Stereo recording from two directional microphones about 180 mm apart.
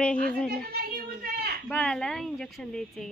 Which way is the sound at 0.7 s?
60° right (ahead or behind).